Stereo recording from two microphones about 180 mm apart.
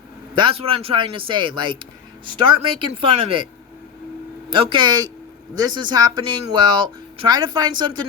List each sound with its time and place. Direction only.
0.3 s speech: 30° right (ahead or behind)
4.5 s speech: 30° right (ahead or behind)